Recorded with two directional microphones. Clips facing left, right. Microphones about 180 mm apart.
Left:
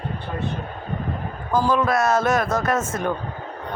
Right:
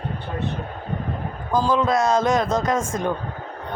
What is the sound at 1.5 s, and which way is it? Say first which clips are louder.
A man's voice: even; 15° right (ahead or behind).